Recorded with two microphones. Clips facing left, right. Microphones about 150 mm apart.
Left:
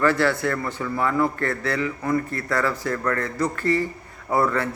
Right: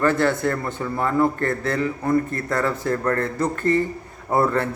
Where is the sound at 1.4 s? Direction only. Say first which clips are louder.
Right 2 dB; 45° right (ahead or behind).